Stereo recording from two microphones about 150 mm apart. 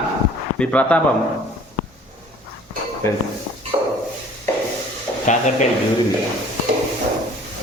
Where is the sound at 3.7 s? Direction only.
20° right (ahead or behind).